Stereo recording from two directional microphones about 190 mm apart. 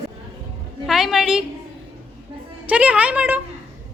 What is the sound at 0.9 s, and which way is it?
Speech, centre (ahead or behind).